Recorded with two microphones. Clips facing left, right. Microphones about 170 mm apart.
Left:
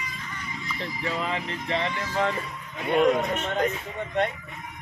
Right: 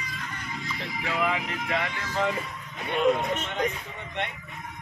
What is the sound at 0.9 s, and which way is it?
Speech, 80° right.